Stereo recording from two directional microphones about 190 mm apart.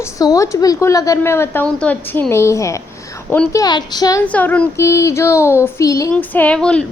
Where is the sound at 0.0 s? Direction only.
20° left (ahead or behind).